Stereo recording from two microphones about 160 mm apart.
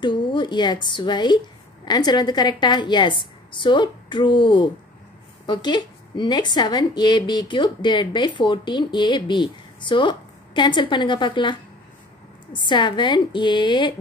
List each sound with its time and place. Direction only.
0.0 s a woman's voice: 30° left (ahead or behind)
12.5 s a woman's voice: 30° left (ahead or behind)